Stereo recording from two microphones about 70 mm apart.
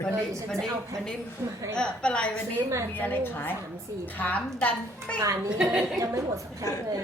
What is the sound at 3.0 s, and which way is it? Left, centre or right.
A woman's voice, left.